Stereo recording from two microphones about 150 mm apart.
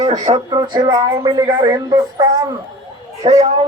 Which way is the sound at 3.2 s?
40° right (ahead or behind).